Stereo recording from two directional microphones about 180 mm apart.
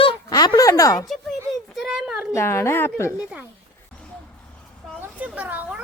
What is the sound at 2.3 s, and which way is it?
Speech, 15° left (ahead or behind).